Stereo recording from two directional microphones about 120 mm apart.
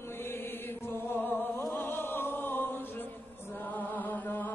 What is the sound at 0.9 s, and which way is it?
Music, 20° left (ahead or behind).